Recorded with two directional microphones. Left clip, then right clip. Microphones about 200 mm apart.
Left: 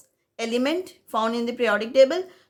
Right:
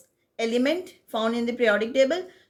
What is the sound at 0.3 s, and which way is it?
A woman's voice, 30° left (ahead or behind).